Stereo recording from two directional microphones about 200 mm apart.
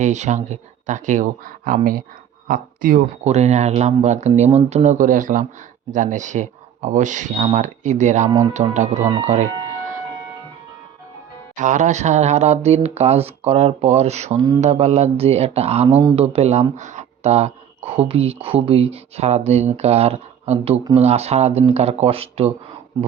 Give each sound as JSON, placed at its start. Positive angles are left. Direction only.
{"t": 0.0, "sound": "speech", "side_deg": -35}
{"t": 8.3, "sound": "speech", "side_deg": -20}
{"t": 8.7, "sound": "speech", "side_deg": -35}
{"t": 11.5, "sound": "speech", "side_deg": -40}